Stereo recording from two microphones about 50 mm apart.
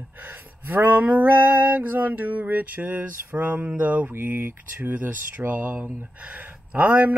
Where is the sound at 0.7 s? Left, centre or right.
Right.